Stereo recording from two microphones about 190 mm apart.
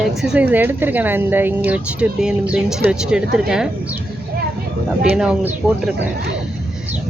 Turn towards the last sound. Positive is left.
turn(degrees=-5)  # may be behind; listen again after turning